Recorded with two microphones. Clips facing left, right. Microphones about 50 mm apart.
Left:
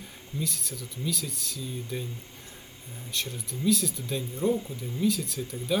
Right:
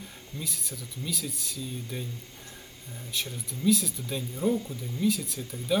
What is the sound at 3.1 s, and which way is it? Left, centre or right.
Speech, centre.